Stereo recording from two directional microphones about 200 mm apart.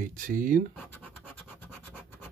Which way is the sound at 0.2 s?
45° right (ahead or behind).